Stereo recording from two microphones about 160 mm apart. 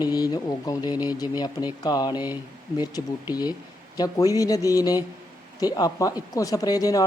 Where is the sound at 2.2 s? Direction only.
10° right (ahead or behind).